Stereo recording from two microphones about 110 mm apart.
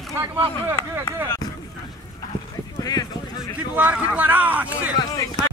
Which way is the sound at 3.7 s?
15° right (ahead or behind).